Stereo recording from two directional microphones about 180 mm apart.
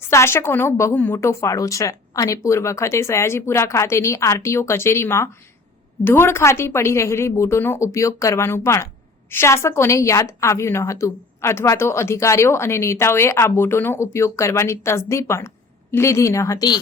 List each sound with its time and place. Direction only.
0.0 s a woman's voice: 15° left (ahead or behind)